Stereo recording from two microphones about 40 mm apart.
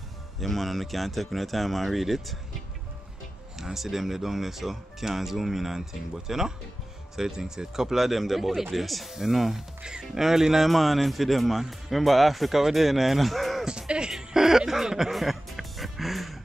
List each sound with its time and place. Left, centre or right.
0.4 s speech: centre
10.7 s speech: centre
13.7 s music: right
14.1 s a sound: centre
14.7 s music: centre